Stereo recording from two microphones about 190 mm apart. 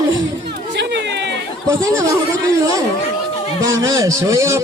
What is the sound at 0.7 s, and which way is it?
Chatter, 65° right (ahead or behind).